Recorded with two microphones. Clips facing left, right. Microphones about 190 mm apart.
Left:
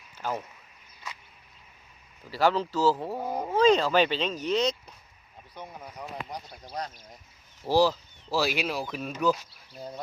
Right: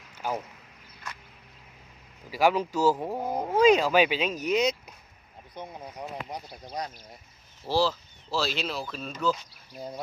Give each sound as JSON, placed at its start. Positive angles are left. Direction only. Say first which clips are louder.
{"t": 0.2, "sound": "speech", "louder": "right 1 dB", "side_deg": -10}
{"t": 2.3, "sound": "speech", "louder": "right 1 dB", "side_deg": -10}
{"t": 7.6, "sound": "speech", "louder": "left 3 dB", "side_deg": 15}